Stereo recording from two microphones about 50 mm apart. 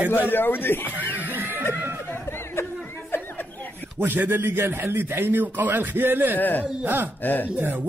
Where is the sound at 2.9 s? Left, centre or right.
Left.